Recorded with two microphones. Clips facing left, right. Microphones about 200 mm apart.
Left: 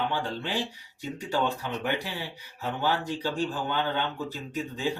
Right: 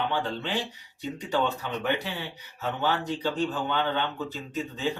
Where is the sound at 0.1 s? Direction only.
10° left (ahead or behind).